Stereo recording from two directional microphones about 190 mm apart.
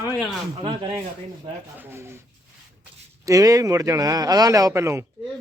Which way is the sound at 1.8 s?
15° right (ahead or behind).